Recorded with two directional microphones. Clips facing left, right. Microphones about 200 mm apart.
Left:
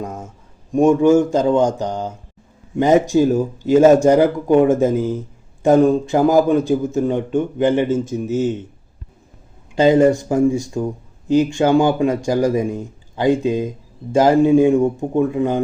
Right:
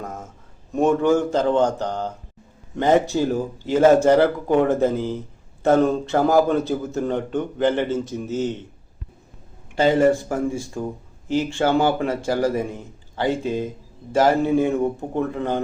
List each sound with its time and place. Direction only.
0.7 s speech: 10° left (ahead or behind)
9.7 s speech: 15° left (ahead or behind)